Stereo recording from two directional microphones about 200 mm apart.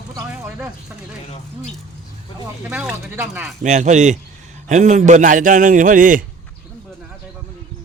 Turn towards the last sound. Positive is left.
turn(degrees=-40)  # may be behind; listen again after turning